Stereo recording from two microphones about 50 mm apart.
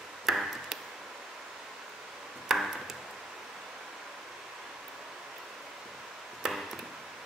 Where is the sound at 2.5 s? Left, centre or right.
Centre.